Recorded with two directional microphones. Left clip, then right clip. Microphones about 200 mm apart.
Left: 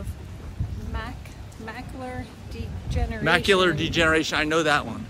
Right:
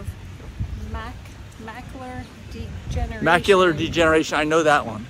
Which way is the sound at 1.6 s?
5° left (ahead or behind).